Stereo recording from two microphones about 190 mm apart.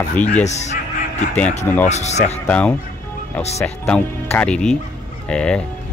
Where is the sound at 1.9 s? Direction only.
35° left (ahead or behind).